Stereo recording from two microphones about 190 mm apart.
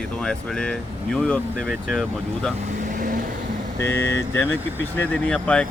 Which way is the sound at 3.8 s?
10° left (ahead or behind).